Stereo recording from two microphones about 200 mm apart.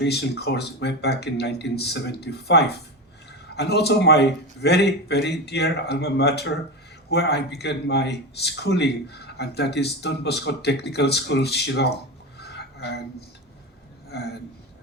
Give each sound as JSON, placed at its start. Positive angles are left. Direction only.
{"t": 0.0, "sound": "a man's voice", "side_deg": 55}
{"t": 12.4, "sound": "dishes", "side_deg": 55}
{"t": 14.1, "sound": "a man's voice", "side_deg": 55}